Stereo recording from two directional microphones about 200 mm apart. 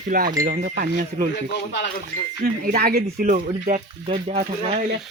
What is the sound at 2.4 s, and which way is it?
Speech, 50° right (ahead or behind).